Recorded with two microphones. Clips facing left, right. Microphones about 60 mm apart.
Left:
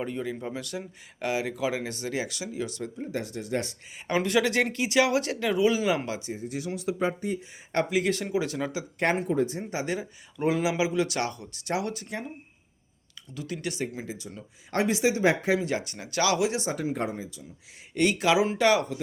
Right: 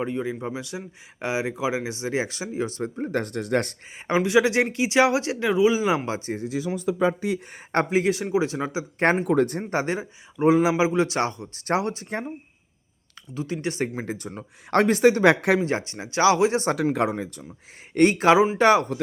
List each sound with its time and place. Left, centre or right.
0.0 s speech: centre
2.9 s speech: right
4.0 s speech: centre
6.1 s speech: right
7.5 s speech: right
8.1 s speech: centre
9.2 s speech: right
9.9 s speech: right
13.3 s speech: right
13.7 s speech: right
15.6 s speech: right
16.6 s speech: right
17.9 s speech: right